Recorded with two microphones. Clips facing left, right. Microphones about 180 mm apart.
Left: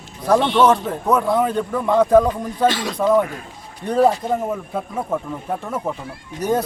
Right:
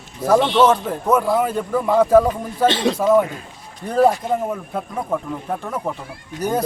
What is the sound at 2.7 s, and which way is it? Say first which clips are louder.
Speech: right 5 dB; 25° right (ahead or behind).